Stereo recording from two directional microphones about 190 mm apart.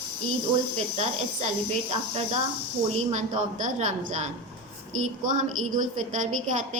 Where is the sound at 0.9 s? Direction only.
35° right (ahead or behind).